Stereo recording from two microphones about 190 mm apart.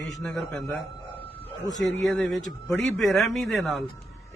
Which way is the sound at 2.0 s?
Centre (ahead or behind).